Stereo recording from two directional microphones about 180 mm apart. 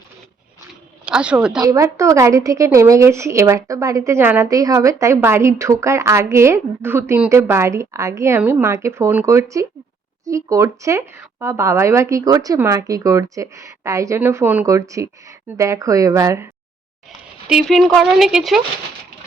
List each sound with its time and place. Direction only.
1.0 s speech: 5° right (ahead or behind)
1.6 s a woman's voice: 15° right (ahead or behind)
17.5 s speech: centre (ahead or behind)